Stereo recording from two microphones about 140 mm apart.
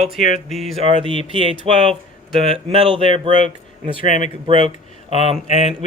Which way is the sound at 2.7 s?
40° right (ahead or behind).